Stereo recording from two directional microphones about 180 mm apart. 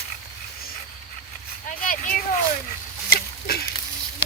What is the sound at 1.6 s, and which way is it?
Vehicle, 45° left (ahead or behind).